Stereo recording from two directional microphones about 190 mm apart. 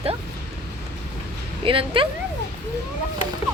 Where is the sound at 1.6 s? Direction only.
30° right (ahead or behind).